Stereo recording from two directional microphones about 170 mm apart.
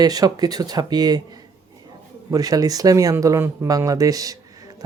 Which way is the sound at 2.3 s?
20° right (ahead or behind).